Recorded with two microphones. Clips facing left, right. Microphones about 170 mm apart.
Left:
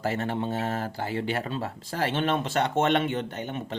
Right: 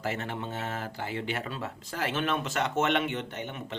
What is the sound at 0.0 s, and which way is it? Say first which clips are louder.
Speech: left 5 dB; 35° left (ahead or behind).